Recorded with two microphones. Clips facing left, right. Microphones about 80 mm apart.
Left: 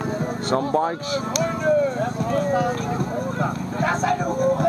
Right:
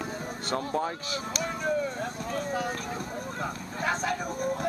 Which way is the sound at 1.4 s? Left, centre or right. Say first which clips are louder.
Left 10 dB; left.